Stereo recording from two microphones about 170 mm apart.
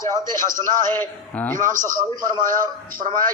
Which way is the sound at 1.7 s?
50° right (ahead or behind).